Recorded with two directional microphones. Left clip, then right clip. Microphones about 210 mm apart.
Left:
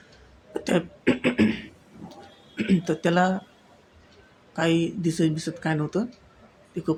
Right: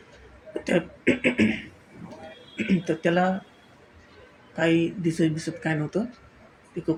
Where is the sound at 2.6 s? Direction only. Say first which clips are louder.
Even; 15° left (ahead or behind).